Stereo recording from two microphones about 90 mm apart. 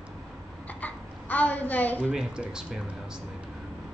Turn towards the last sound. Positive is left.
turn(degrees=-10)  # may be behind; listen again after turning